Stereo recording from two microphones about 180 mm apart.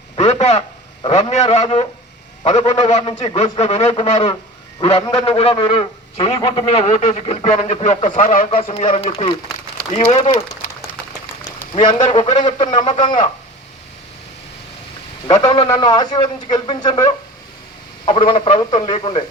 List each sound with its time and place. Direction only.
0.2 s a sound: 35° left (ahead or behind)
1.0 s a man's voice: 40° left (ahead or behind); by 6.7 s 20° left (ahead or behind)
6.7 s a man's voice: 40° left (ahead or behind)
11.7 s a man's voice: 25° left (ahead or behind)
12.0 s a man's voice: 35° left (ahead or behind)
12.5 s a man's voice: 25° left (ahead or behind)
15.3 s a man's voice: 25° left (ahead or behind)